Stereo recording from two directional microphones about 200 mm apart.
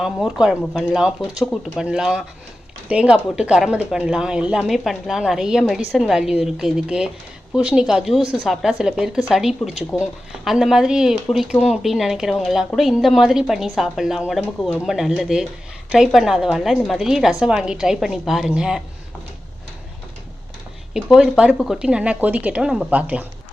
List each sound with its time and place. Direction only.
0.0 s speech: 5° right (ahead or behind)
20.9 s speech: 5° right (ahead or behind)